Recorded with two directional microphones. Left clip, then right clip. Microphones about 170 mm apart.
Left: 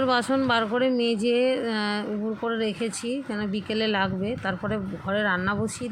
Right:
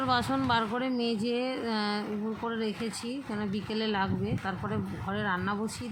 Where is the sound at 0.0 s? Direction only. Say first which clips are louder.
Left 5 dB; 15° left (ahead or behind).